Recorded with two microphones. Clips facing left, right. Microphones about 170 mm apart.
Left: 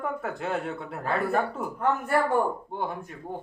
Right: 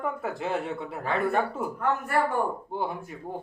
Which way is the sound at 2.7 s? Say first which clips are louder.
Right 1 dB; 5° right (ahead or behind).